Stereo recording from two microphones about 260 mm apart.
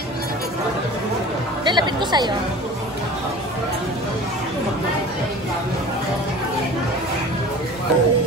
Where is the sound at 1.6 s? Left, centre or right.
Centre.